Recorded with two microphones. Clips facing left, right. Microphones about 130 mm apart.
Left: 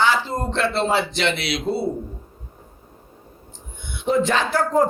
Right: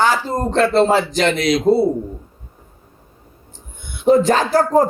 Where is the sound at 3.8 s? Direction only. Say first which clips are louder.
Right 7 dB; 40° right (ahead or behind).